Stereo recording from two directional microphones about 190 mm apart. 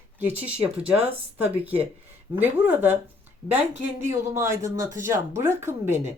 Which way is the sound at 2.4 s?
10° right (ahead or behind).